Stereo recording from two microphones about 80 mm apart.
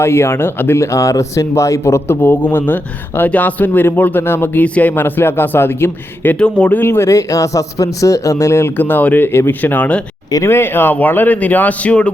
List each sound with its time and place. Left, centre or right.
0.0 s a man's voice: left
6.4 s speech: centre
7.1 s a man's voice: left; by 12.1 s centre